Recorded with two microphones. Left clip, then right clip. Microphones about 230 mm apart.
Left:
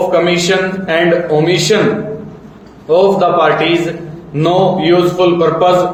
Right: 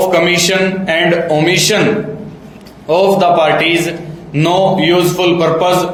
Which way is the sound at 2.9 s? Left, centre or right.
Right.